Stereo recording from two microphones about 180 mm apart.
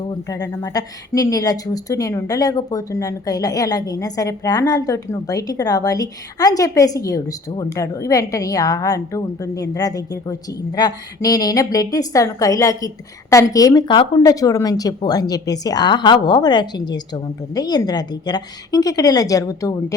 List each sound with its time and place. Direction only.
0.0 s a woman's voice: 20° left (ahead or behind)